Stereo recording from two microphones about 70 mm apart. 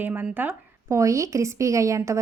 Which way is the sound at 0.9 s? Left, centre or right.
Right.